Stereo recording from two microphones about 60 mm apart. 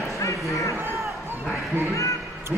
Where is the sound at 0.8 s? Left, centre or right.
Right.